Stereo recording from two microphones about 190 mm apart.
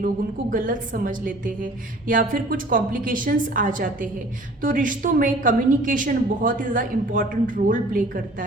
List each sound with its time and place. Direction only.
0.5 s a woman's voice: 45° right (ahead or behind)